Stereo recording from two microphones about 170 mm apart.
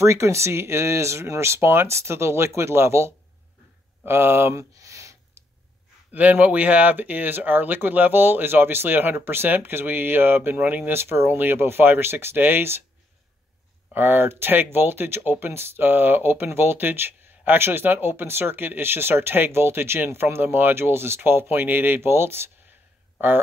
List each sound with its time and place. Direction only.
0.0 s speech: 15° right (ahead or behind)
4.0 s a sound: 15° right (ahead or behind)
6.1 s speech: 10° right (ahead or behind)
13.9 s speech: 10° right (ahead or behind)